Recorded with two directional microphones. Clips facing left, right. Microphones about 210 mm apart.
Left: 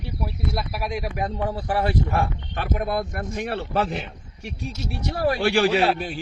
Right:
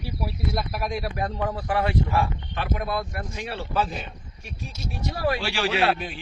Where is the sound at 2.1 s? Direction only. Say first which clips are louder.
Even; 45° left (ahead or behind); by 4.0 s 65° left (ahead or behind).